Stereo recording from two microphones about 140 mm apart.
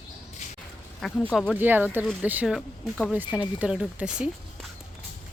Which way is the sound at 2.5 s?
Centre (ahead or behind).